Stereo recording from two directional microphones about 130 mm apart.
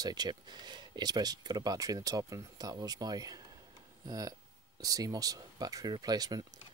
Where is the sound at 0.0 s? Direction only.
30° right (ahead or behind).